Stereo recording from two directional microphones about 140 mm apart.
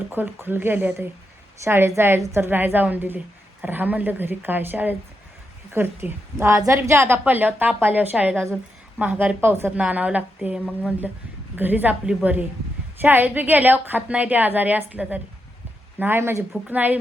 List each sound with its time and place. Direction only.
0.1 s a woman's voice: 15° right (ahead or behind)